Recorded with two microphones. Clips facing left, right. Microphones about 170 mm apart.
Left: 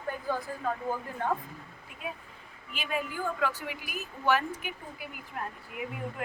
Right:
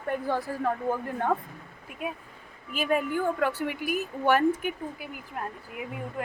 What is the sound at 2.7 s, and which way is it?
A woman's voice, 50° right (ahead or behind).